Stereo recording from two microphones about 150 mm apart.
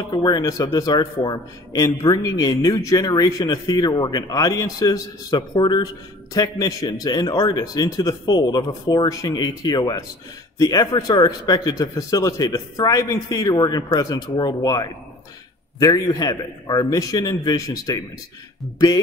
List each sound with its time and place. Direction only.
0.0 s a man's voice: 30° left (ahead or behind)